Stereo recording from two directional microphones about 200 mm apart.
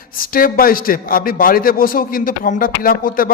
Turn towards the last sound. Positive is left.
turn(degrees=45)  # may be behind; listen again after turning